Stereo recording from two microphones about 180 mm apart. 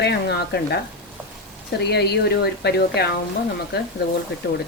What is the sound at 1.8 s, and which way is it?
Speech, 65° left (ahead or behind).